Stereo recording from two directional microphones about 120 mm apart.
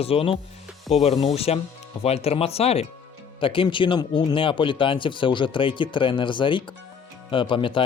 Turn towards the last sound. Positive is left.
turn(degrees=45)  # may be behind; listen again after turning